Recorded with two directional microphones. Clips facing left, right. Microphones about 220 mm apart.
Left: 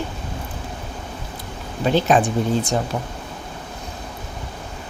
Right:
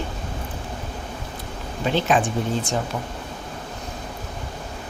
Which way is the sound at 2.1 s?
40° left (ahead or behind).